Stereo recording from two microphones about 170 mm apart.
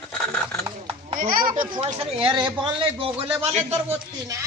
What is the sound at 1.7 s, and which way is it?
Speech, 35° right (ahead or behind).